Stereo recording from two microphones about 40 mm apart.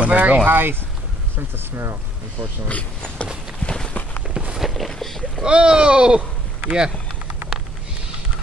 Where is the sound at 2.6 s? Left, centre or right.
Left.